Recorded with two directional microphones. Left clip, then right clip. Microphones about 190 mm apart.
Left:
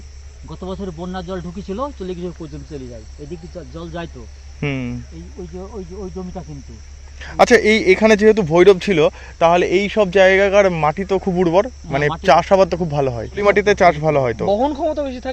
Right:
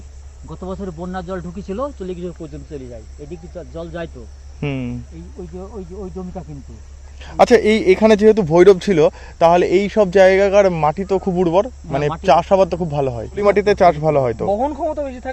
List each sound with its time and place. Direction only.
0.4 s speech: 10° left (ahead or behind); by 2.0 s 30° left (ahead or behind)
2.0 s speech: 45° left (ahead or behind)
4.6 s speech: centre (ahead or behind)
13.3 s speech: 10° right (ahead or behind)
14.4 s speech: 50° left (ahead or behind)